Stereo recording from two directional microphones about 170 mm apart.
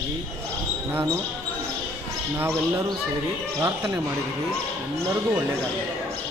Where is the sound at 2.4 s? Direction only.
15° right (ahead or behind).